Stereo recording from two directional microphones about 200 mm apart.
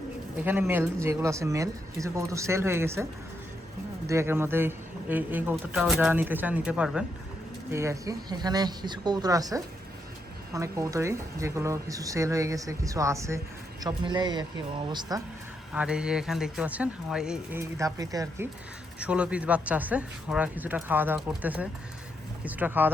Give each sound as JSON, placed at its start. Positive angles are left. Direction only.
{"t": 0.3, "sound": "speech", "side_deg": -10}
{"t": 15.7, "sound": "speech", "side_deg": -5}
{"t": 18.9, "sound": "speech", "side_deg": -5}